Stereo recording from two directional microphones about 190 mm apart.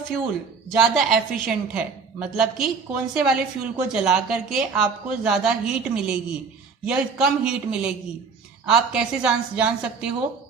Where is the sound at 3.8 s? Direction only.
5° right (ahead or behind).